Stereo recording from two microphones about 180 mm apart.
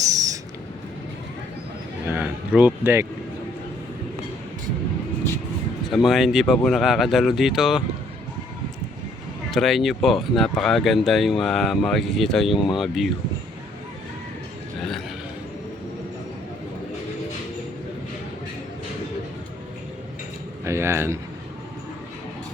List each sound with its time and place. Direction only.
0.0 s owl: 20° right (ahead or behind)
2.0 s speech: 10° right (ahead or behind)
6.1 s speech: centre (ahead or behind)
9.5 s speech: centre (ahead or behind)
20.7 s speech: 15° right (ahead or behind)